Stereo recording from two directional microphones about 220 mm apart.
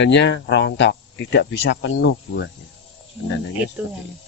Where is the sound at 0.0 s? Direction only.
55° left (ahead or behind).